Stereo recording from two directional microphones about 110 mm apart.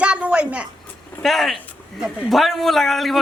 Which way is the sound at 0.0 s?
10° right (ahead or behind).